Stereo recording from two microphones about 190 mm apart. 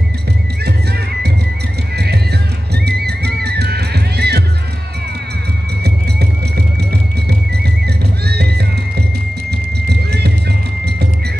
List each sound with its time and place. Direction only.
2.7 s music: 60° right (ahead or behind)
5.9 s music: 60° right (ahead or behind)